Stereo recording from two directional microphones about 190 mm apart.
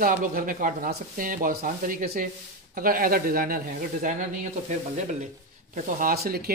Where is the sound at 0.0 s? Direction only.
45° right (ahead or behind).